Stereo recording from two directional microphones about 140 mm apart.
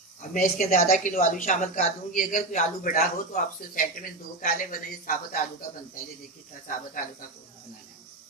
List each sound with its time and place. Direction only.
0.2 s speech: 65° left (ahead or behind)